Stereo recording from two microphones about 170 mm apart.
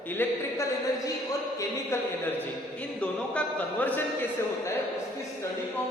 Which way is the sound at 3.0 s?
10° left (ahead or behind).